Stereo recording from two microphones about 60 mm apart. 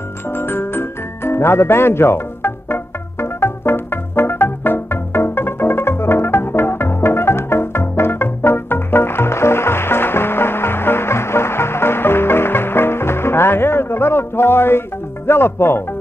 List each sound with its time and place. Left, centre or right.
0.3 s music: left
15.2 s speech: left